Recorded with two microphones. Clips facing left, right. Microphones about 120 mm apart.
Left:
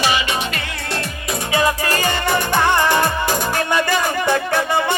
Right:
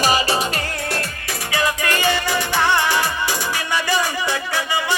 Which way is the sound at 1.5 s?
25° left (ahead or behind).